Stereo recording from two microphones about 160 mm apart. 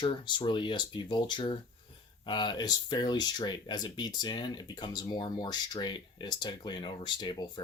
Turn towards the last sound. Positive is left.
turn(degrees=30)  # may be behind; listen again after turning